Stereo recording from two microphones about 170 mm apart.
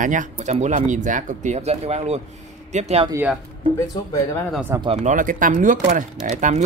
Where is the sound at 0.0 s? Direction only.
50° right (ahead or behind).